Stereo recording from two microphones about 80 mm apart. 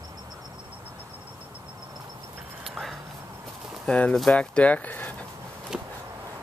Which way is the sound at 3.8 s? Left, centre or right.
Centre.